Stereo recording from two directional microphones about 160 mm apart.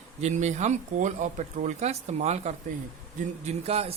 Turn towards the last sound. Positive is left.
turn(degrees=-40)  # may be behind; listen again after turning